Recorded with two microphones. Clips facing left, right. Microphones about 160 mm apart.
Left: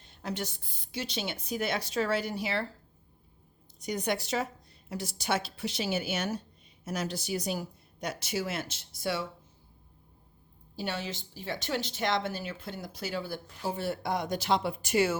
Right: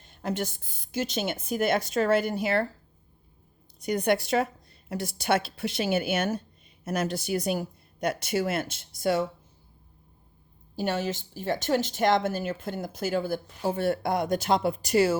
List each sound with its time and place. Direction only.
0.0 s a woman's voice: 50° right (ahead or behind)
3.8 s a woman's voice: 55° right (ahead or behind)
10.8 s a woman's voice: 45° right (ahead or behind)